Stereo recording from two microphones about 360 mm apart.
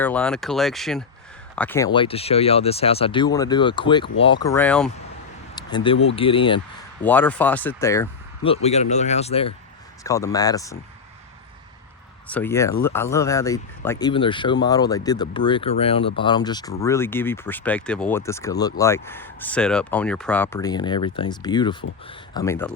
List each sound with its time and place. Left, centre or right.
0.0 s speech: centre
12.3 s speech: centre